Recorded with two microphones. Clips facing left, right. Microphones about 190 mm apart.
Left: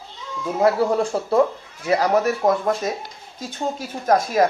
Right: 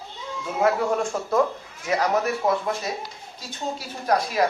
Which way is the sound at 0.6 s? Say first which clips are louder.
Left 4 dB; 30° left (ahead or behind).